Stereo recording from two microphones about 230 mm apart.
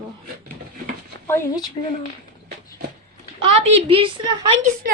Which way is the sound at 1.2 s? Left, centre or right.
Centre.